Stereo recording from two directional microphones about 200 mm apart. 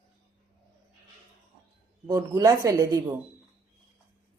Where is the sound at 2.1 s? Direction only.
15° right (ahead or behind).